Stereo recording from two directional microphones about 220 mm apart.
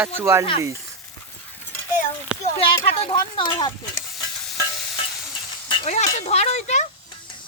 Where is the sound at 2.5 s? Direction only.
25° left (ahead or behind).